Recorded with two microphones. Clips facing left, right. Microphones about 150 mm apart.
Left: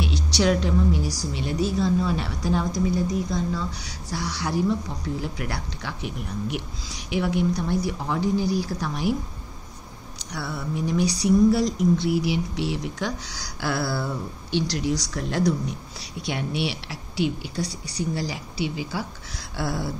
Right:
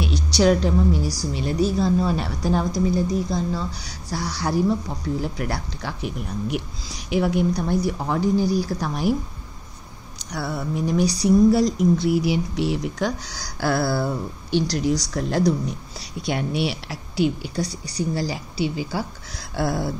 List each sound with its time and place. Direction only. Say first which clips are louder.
0.0 s a woman's voice: right 4 dB; 40° right (ahead or behind)
10.3 s a woman's voice: right 3 dB; 45° right (ahead or behind)